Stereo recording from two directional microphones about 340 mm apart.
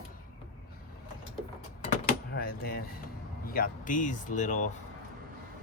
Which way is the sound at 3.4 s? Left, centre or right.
Left.